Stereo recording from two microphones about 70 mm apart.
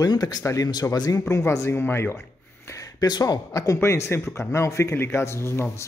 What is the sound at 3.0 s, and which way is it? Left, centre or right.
Speech, left.